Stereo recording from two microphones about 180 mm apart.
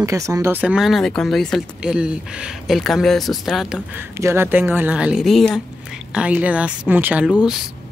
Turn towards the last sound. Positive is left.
turn(degrees=-5)  # may be behind; listen again after turning